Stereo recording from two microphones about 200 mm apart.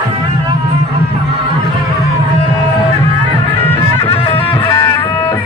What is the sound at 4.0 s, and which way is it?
Music, 30° left (ahead or behind).